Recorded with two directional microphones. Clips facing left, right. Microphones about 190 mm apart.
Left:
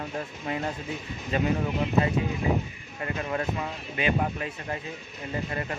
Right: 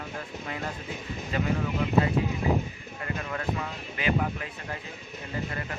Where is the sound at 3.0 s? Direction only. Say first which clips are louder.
Left 3 dB; 25° left (ahead or behind).